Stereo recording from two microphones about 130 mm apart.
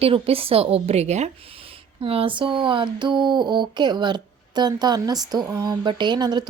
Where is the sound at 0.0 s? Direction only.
45° right (ahead or behind).